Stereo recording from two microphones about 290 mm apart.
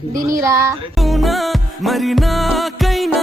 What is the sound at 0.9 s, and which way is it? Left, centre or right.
Music, centre.